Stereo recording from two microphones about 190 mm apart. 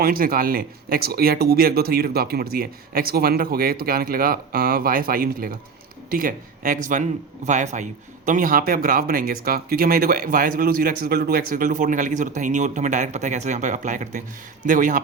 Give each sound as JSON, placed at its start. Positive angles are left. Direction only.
{"t": 0.0, "sound": "speech", "side_deg": -50}